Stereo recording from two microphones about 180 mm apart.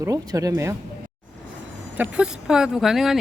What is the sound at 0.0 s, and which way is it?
Speech, 20° right (ahead or behind).